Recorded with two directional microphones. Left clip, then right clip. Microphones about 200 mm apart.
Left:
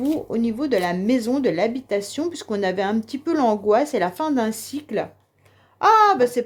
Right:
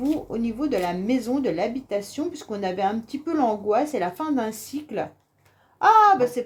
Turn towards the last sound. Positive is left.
turn(degrees=45)  # may be behind; listen again after turning